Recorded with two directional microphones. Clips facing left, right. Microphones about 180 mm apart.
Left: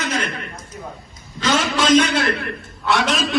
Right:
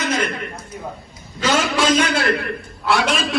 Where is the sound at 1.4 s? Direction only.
10° right (ahead or behind).